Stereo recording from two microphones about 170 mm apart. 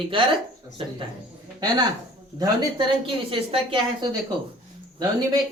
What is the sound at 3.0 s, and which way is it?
A woman's voice, 30° right (ahead or behind).